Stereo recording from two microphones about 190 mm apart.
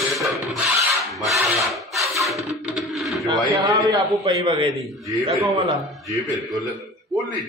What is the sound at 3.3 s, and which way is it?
A man's voice, 20° right (ahead or behind).